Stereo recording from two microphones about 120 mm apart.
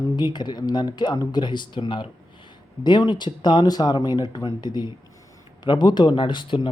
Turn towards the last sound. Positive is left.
turn(degrees=45)  # may be behind; listen again after turning